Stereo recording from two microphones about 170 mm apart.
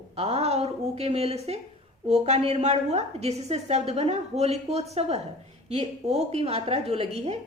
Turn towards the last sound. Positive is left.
turn(degrees=-35)  # may be behind; listen again after turning